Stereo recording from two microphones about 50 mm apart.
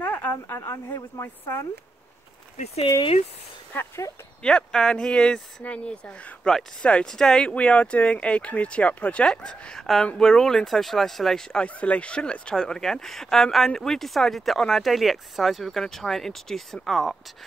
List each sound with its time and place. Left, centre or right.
0.0 s a sound: left
0.6 s a man's voice: left
1.2 s speech: left
4.4 s speech: centre
7.4 s speech: left
11.6 s speech: left; by 17.2 s centre